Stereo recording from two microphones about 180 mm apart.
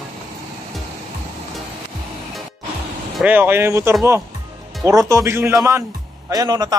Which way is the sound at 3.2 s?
10° right (ahead or behind).